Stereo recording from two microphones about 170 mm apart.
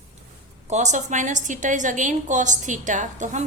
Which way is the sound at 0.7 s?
45° right (ahead or behind).